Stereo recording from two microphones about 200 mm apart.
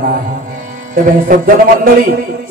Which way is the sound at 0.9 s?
45° right (ahead or behind).